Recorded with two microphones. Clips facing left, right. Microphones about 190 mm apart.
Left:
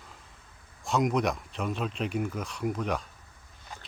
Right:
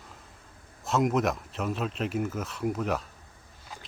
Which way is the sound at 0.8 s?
Centre (ahead or behind).